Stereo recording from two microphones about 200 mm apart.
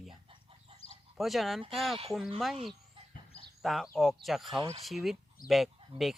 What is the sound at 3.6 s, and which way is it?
Speech, centre (ahead or behind).